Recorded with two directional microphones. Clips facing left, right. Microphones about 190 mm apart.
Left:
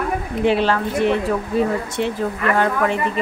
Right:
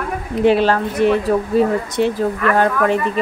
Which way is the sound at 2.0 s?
40° right (ahead or behind).